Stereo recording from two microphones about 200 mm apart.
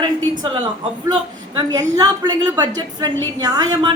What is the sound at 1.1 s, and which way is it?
A woman's voice, 20° right (ahead or behind).